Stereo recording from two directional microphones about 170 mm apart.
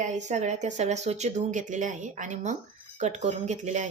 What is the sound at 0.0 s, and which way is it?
Speech, 45° right (ahead or behind).